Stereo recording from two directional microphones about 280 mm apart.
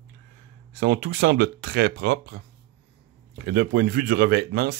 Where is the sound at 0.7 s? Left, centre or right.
Right.